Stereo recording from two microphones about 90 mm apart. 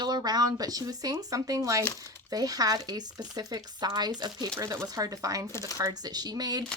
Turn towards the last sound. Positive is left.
turn(degrees=-45)  # may be behind; listen again after turning